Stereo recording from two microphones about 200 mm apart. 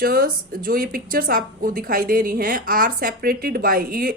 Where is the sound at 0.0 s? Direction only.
45° right (ahead or behind).